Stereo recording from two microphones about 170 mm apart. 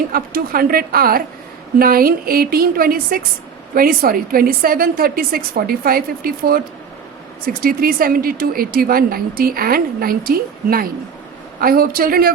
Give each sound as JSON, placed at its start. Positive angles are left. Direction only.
{"t": 0.1, "sound": "a woman's voice", "side_deg": -60}